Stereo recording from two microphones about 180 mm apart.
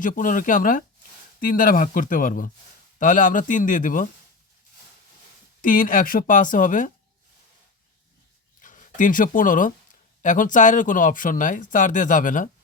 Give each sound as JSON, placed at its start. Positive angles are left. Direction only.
{"t": 0.0, "sound": "speech", "side_deg": 50}
{"t": 5.6, "sound": "speech", "side_deg": 50}
{"t": 8.6, "sound": "speech", "side_deg": 45}